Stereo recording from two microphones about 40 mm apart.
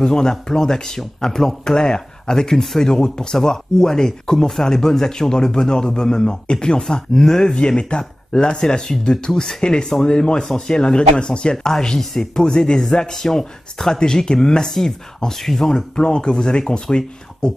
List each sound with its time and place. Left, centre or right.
0.0 s speech: centre
11.5 s speech: centre
16.0 s speech: left